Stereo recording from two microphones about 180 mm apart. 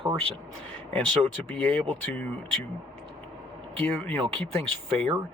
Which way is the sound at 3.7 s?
10° left (ahead or behind).